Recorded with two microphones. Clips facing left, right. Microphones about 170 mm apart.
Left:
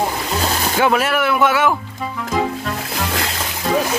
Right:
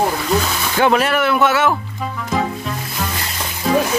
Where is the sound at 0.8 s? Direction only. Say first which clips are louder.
Right 2 dB; 5° left (ahead or behind).